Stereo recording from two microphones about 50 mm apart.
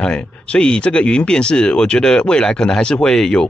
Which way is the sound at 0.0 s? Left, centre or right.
Centre.